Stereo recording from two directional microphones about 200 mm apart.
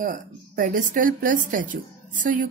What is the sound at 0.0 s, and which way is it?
Speech, 40° right (ahead or behind).